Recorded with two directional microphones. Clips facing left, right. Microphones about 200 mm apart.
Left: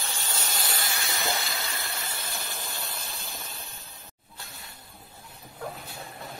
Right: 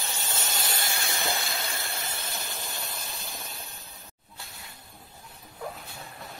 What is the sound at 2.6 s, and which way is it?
Steam, 20° right (ahead or behind).